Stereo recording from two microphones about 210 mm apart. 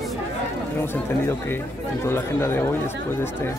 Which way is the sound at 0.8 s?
10° left (ahead or behind).